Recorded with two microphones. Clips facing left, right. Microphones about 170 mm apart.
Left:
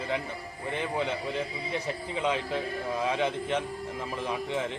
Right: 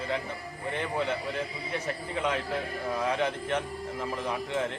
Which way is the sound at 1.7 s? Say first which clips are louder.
Even; 15° left (ahead or behind).